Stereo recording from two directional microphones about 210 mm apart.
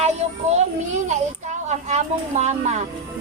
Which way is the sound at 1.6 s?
35° right (ahead or behind).